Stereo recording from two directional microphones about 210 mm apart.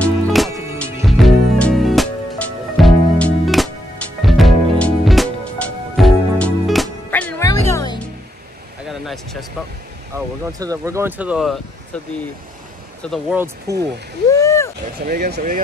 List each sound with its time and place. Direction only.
0.0 s music: centre (ahead or behind)
7.4 s music: 20° left (ahead or behind)
8.8 s a sound: centre (ahead or behind)
10.1 s speech: 15° right (ahead or behind); by 13.4 s centre (ahead or behind)
13.7 s speech: 15° right (ahead or behind)
14.3 s a sound: 15° left (ahead or behind)
15.0 s speech: 50° right (ahead or behind)